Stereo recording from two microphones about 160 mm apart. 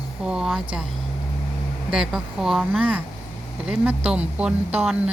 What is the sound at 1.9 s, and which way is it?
A woman's voice, 5° right (ahead or behind).